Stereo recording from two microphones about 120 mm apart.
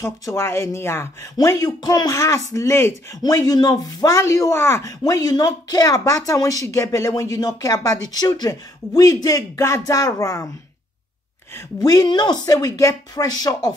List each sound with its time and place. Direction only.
0.0 s speech: 25° left (ahead or behind)
11.5 s speech: 30° left (ahead or behind)